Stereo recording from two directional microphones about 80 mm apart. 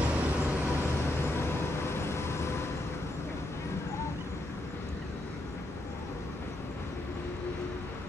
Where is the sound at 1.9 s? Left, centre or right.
Left.